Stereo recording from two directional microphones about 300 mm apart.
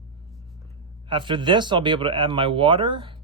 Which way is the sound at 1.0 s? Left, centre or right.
Centre.